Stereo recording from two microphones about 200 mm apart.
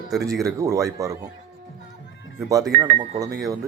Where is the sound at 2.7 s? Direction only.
45° right (ahead or behind).